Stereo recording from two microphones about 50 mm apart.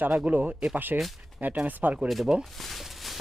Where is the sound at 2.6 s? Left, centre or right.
Centre.